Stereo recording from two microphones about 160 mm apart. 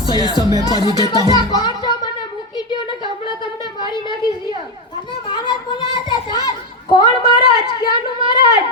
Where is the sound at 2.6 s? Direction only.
30° left (ahead or behind).